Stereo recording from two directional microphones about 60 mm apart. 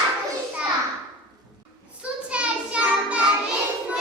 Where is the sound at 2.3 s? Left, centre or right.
Centre.